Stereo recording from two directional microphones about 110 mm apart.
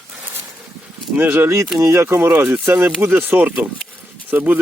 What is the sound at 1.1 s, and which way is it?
Speech, 20° right (ahead or behind).